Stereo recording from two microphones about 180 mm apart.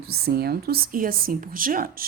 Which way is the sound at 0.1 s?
60° right (ahead or behind).